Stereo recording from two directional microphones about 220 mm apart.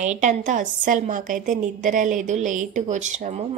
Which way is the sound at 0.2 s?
35° right (ahead or behind).